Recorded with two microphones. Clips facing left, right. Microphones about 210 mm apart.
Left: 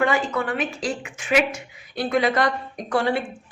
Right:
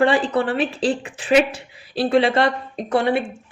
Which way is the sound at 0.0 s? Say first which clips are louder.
Right 5 dB; 30° right (ahead or behind).